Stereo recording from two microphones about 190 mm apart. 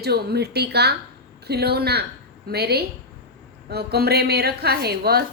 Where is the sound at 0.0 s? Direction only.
60° right (ahead or behind).